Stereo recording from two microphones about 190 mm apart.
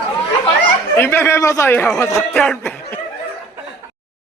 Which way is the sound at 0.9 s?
15° left (ahead or behind).